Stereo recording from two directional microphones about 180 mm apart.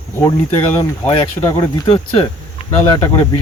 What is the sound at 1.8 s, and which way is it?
Speech, 30° left (ahead or behind).